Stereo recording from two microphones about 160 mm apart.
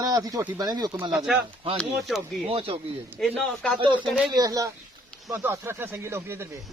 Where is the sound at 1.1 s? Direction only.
5° right (ahead or behind).